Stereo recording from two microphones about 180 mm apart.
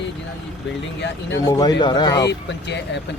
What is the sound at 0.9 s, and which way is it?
Speech, 70° left (ahead or behind).